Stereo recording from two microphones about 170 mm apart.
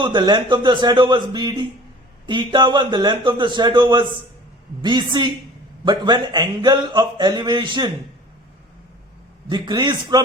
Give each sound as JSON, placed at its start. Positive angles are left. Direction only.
{"t": 0.0, "sound": "speech", "side_deg": -25}
{"t": 9.5, "sound": "speech", "side_deg": -25}